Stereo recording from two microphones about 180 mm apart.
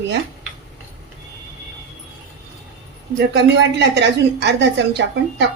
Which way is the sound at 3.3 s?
75° right (ahead or behind).